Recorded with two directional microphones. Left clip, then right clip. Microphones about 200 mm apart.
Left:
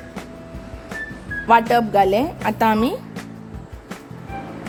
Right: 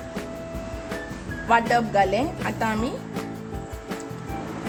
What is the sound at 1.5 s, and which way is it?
Speech, 45° left (ahead or behind).